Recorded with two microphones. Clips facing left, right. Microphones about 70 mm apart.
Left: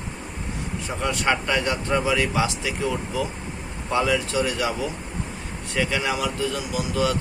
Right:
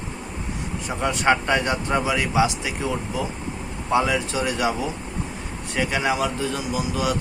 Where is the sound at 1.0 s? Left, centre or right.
Right.